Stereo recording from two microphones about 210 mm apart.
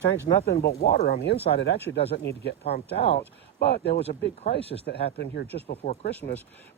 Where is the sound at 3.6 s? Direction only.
50° left (ahead or behind).